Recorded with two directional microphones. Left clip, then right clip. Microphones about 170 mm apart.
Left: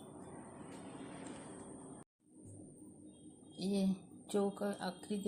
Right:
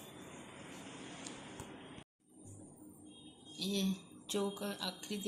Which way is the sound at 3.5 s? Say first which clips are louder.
Right 1 dB; 55° left (ahead or behind).